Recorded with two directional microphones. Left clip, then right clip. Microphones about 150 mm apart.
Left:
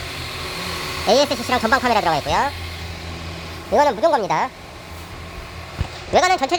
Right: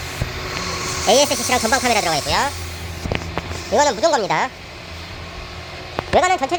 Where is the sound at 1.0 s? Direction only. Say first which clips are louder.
Right 1 dB; 25° left (ahead or behind); by 2.5 s 10° left (ahead or behind).